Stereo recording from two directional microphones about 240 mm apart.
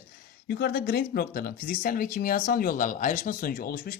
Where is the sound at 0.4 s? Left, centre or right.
Left.